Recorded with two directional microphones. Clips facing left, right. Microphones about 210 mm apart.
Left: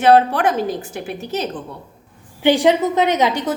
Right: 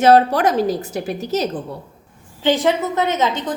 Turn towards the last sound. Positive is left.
turn(degrees=15)  # may be behind; listen again after turning